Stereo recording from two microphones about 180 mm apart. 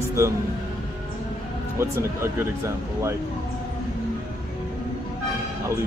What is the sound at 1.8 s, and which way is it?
Speech, 15° right (ahead or behind).